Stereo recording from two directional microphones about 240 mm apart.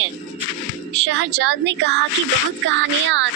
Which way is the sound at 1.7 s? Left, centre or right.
Right.